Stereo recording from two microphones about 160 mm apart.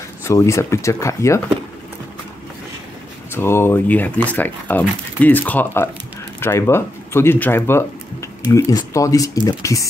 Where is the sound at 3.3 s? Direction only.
15° left (ahead or behind).